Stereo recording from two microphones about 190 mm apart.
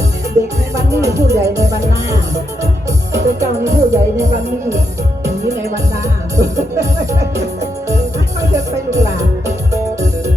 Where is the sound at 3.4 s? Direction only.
15° right (ahead or behind).